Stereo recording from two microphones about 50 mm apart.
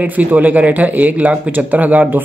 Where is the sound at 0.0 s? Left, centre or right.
Right.